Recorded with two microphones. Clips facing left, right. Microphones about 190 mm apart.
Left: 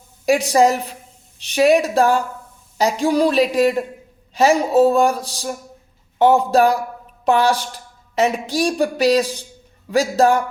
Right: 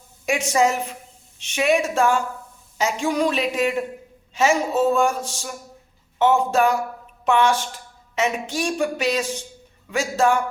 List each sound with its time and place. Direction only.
0.3 s speech: 35° left (ahead or behind)